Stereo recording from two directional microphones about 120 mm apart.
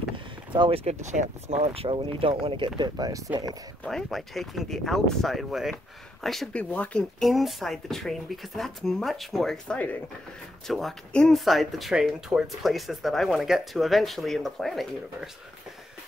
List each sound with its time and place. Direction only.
0.1 s vehicle: 45° right (ahead or behind)
1.0 s speech: 85° right; by 3.5 s 30° right (ahead or behind)
3.8 s speech: centre (ahead or behind)
7.2 s speech: centre (ahead or behind)